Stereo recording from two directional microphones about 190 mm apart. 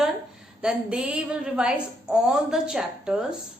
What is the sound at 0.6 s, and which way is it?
A woman's voice, 5° right (ahead or behind).